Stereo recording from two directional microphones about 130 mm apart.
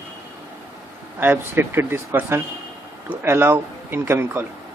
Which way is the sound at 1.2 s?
15° right (ahead or behind).